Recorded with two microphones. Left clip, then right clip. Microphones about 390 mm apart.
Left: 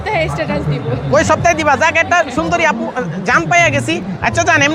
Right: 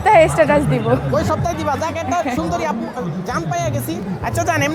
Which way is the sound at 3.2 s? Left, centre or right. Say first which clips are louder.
Left 12 dB; left.